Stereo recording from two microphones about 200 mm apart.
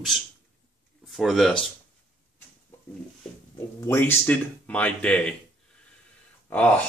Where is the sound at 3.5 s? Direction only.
10° left (ahead or behind).